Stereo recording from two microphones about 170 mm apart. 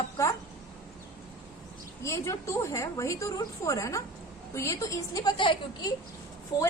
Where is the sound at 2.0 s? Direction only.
15° left (ahead or behind).